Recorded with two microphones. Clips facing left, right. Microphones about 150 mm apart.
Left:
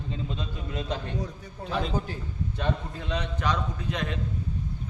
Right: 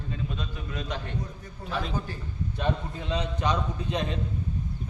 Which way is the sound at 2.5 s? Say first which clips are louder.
Right 1 dB; 10° right (ahead or behind).